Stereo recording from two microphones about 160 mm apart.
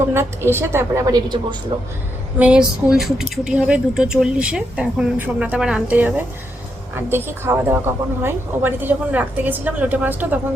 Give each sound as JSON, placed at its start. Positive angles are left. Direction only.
{"t": 0.1, "sound": "a woman's voice", "side_deg": -15}
{"t": 2.4, "sound": "a woman's voice", "side_deg": -5}